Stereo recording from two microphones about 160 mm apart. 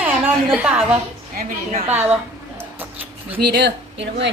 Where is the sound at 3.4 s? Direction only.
90° right.